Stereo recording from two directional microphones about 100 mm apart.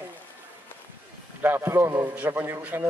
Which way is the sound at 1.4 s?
25° right (ahead or behind).